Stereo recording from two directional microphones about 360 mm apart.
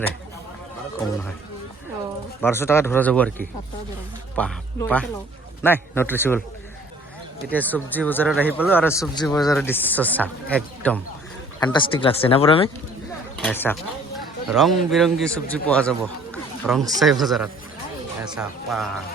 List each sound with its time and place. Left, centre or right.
2.4 s a man's voice: centre
7.5 s a man's voice: centre
13.3 s a man's voice: centre